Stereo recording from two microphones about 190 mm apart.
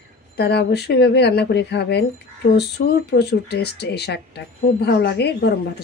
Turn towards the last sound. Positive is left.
turn(degrees=60)  # may be behind; listen again after turning